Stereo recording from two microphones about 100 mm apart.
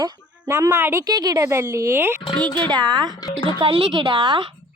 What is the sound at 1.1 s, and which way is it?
Speech, 40° right (ahead or behind).